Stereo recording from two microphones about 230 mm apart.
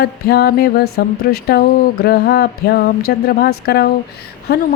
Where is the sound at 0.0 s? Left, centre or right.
Left.